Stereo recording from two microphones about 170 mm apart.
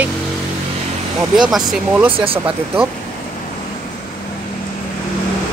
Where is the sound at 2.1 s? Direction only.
30° right (ahead or behind).